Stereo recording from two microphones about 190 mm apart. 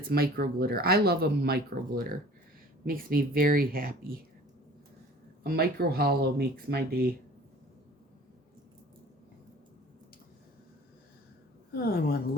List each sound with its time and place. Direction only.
0.1 s speech: 55° right (ahead or behind)
5.4 s speech: 55° right (ahead or behind)
11.7 s a woman's voice: 55° left (ahead or behind)